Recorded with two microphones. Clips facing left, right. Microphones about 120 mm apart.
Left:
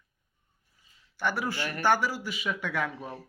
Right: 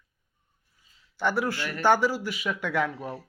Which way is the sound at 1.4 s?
15° left (ahead or behind).